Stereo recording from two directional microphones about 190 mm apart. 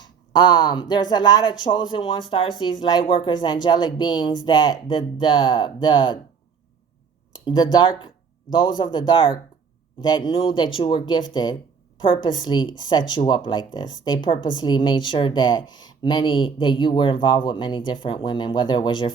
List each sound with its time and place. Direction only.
0.0 s speech: 20° left (ahead or behind)
7.3 s speech: 20° left (ahead or behind)